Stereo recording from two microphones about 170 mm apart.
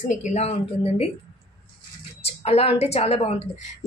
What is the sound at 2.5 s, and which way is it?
Speech, 35° left (ahead or behind).